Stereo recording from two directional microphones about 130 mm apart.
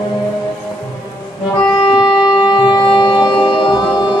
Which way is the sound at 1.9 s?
35° left (ahead or behind).